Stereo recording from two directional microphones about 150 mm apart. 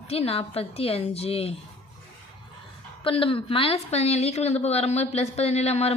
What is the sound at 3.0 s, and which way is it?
A woman's voice, 35° left (ahead or behind).